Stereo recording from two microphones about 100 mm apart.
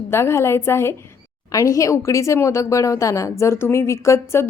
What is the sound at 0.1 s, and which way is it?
A woman's voice, 25° left (ahead or behind).